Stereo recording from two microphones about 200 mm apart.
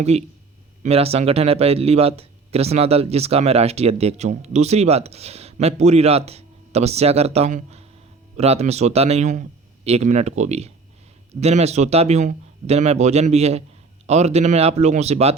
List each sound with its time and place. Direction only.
0.0 s speech: 30° right (ahead or behind)